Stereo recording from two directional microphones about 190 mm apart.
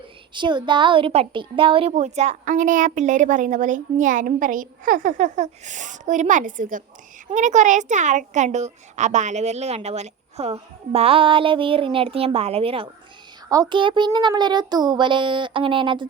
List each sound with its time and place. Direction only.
0.3 s a woman's voice: 25° right (ahead or behind)